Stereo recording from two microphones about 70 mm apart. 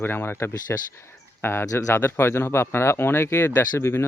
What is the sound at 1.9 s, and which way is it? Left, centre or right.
Speech, left.